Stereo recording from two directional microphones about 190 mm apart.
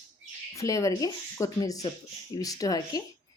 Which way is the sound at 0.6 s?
15° left (ahead or behind).